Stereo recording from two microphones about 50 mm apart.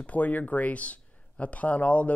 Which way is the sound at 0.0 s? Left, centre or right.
Left.